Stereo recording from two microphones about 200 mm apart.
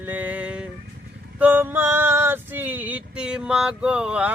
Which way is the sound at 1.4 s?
10° right (ahead or behind).